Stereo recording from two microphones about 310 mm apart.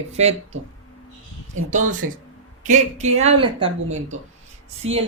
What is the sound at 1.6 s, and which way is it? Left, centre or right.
Speech, right.